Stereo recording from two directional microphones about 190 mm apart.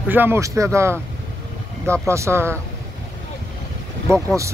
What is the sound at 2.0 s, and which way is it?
Speech, 15° right (ahead or behind).